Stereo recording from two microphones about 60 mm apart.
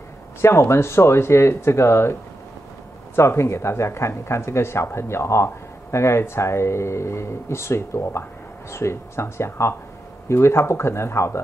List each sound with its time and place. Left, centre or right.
0.4 s speech: left
3.2 s speech: left